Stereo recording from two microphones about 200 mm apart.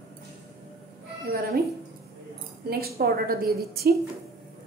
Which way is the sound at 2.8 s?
50° right (ahead or behind).